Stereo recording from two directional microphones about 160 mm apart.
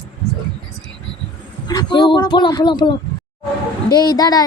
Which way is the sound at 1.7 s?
25° left (ahead or behind).